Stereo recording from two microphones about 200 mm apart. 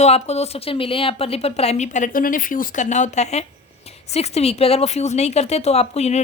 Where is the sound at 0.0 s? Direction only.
30° left (ahead or behind).